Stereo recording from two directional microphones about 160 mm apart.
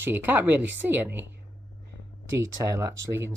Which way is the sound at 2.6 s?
20° right (ahead or behind).